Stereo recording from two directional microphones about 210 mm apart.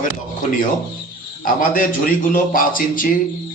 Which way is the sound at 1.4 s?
40° left (ahead or behind).